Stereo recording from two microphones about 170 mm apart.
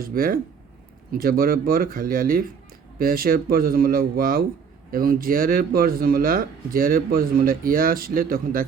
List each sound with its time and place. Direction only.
0.0 s speech: 55° right (ahead or behind)